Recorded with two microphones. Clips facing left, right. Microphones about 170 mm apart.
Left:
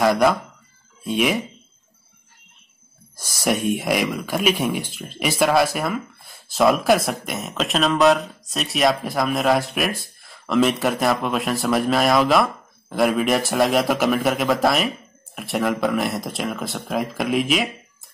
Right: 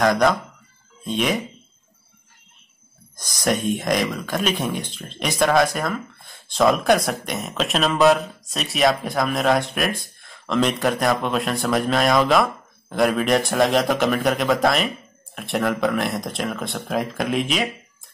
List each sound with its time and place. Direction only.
0.0 s speech: 5° left (ahead or behind)
3.2 s speech: 10° left (ahead or behind)